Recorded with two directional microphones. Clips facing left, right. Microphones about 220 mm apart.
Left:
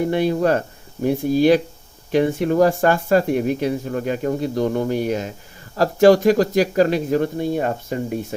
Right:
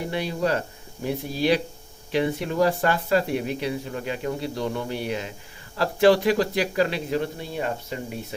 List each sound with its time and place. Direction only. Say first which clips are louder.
0.1 s speech: left 7 dB; 50° left (ahead or behind)